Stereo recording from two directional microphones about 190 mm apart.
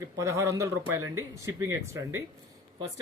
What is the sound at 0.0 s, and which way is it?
Speech, 15° right (ahead or behind).